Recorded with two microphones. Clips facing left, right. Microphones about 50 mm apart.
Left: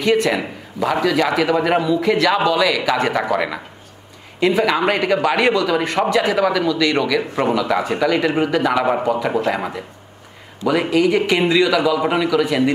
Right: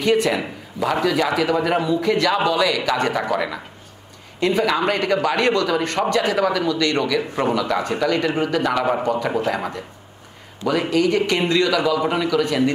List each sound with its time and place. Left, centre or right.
0.0 s a man's voice: centre